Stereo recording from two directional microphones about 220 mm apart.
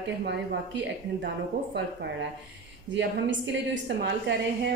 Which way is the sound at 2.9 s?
55° right (ahead or behind).